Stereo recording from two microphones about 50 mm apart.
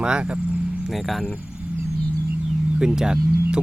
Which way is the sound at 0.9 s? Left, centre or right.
Centre.